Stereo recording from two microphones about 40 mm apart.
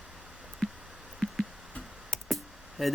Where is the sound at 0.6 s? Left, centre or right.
Centre.